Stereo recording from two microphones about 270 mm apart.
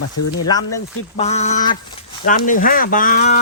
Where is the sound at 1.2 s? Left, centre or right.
Left.